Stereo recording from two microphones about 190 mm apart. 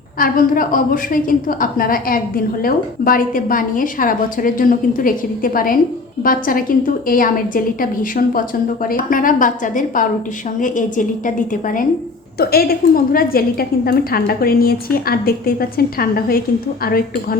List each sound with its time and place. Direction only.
0.2 s a woman's voice: 45° left (ahead or behind)